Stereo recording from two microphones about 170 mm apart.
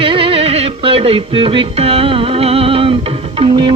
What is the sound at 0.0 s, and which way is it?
Music, 30° right (ahead or behind).